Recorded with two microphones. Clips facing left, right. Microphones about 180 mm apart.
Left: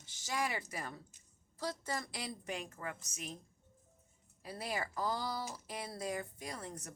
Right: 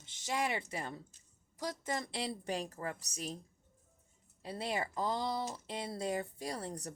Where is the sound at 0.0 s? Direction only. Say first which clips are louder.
Right 2 dB; 25° right (ahead or behind).